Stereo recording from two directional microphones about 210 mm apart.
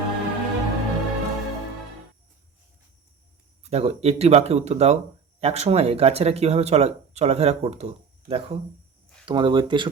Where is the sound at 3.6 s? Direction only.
30° right (ahead or behind).